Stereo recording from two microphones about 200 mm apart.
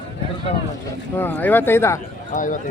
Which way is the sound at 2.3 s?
40° left (ahead or behind).